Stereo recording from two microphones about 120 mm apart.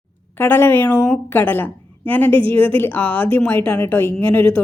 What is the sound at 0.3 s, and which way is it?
A woman's voice, 15° left (ahead or behind).